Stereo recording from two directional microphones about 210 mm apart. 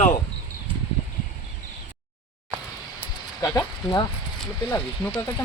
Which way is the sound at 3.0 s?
15° left (ahead or behind).